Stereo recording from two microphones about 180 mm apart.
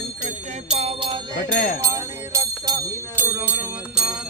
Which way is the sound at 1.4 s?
55° left (ahead or behind).